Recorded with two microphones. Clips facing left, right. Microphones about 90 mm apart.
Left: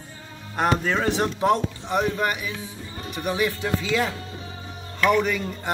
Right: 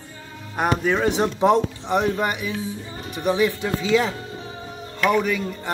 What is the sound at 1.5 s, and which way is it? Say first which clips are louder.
Speech: right 3 dB; centre (ahead or behind).